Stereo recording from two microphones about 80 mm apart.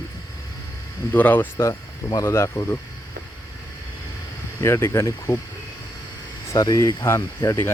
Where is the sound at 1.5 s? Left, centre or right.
Left.